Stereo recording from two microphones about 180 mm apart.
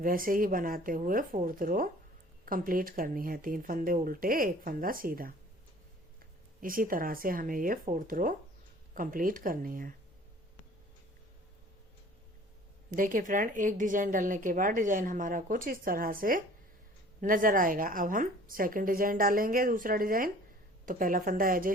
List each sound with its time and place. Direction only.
0.0 s speech: 50° right (ahead or behind)
6.6 s speech: 50° right (ahead or behind)
12.9 s speech: 50° right (ahead or behind)